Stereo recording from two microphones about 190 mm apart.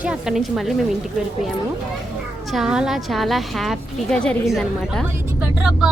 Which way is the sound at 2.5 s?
Centre (ahead or behind).